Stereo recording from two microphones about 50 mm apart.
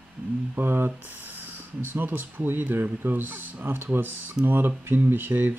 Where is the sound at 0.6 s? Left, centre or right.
Right.